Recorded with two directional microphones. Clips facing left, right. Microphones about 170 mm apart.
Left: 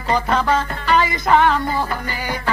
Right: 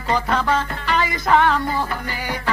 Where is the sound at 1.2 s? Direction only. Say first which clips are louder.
Left 1 dB; 15° left (ahead or behind).